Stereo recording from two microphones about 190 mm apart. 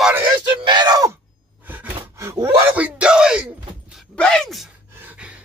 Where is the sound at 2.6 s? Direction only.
10° right (ahead or behind).